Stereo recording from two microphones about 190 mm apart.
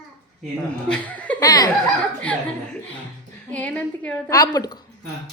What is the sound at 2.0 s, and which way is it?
Speech, 5° left (ahead or behind).